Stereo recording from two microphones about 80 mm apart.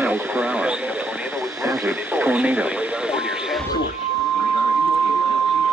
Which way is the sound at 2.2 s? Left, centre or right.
Centre.